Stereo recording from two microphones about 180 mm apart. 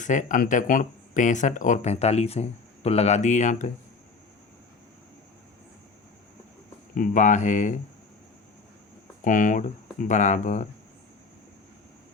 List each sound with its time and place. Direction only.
0.0 s speech: 45° left (ahead or behind)
6.9 s speech: 45° left (ahead or behind)
9.2 s speech: 45° left (ahead or behind)